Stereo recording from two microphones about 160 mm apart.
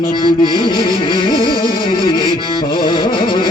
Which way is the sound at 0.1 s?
25° left (ahead or behind).